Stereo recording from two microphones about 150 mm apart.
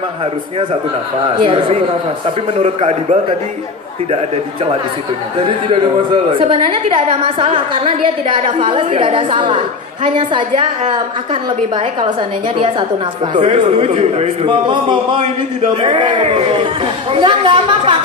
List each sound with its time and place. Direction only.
1.3 s a woman's voice: 35° right (ahead or behind)
2.6 s a man's voice: 50° right (ahead or behind)
5.7 s a woman's voice: 35° right (ahead or behind)
12.5 s a woman's voice: 35° right (ahead or behind)
16.2 s a woman's voice: 45° right (ahead or behind)